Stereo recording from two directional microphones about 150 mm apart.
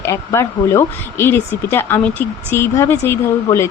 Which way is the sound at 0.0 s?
20° left (ahead or behind).